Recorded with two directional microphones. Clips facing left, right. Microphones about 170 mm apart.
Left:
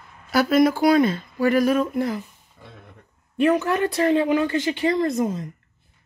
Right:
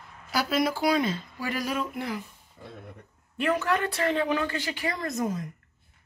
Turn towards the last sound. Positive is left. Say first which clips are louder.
# left 7 dB
turn(degrees=25)  # may be behind; listen again after turning